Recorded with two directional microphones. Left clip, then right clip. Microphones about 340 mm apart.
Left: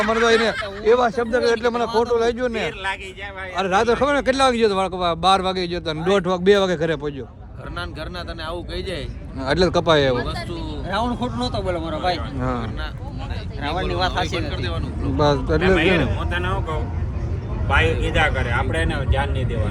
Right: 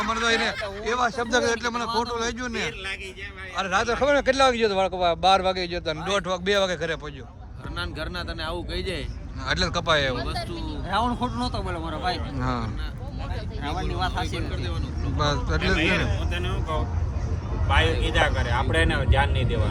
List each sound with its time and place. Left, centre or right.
0.1 s a man's voice: centre
0.9 s a man's voice: centre
3.6 s a man's voice: centre
8.4 s a man's voice: centre
10.8 s a man's voice: centre
17.7 s speech: centre
18.7 s a man's voice: centre